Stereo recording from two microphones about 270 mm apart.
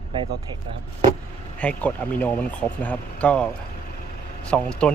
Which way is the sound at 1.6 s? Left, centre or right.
Centre.